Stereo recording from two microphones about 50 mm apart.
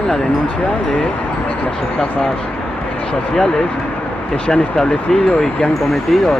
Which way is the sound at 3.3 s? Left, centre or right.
Centre.